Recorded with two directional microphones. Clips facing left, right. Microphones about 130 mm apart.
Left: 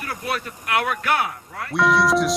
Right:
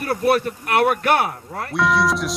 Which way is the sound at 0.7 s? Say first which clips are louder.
Right 5 dB; 45° right (ahead or behind).